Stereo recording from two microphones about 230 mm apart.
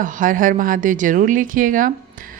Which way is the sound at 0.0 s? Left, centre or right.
Right.